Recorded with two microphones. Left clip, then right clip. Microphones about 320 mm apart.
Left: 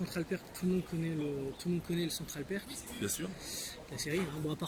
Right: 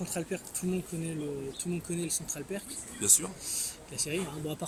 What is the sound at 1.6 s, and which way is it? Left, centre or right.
A man's voice, centre.